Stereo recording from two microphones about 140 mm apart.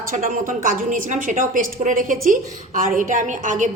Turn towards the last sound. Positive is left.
turn(degrees=-65)  # may be behind; listen again after turning